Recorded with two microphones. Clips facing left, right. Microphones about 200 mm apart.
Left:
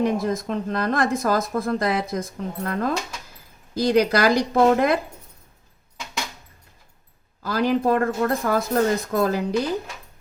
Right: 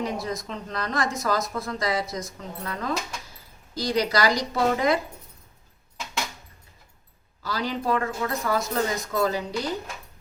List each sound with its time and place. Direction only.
0.0 s a woman's voice: 55° left (ahead or behind)
7.4 s speech: 55° left (ahead or behind)